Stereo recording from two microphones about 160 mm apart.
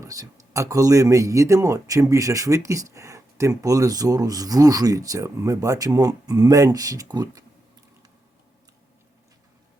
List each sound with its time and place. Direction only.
0.0 s speech: 20° right (ahead or behind)